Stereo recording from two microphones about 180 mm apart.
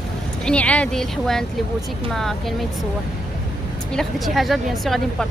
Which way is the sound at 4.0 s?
Centre (ahead or behind).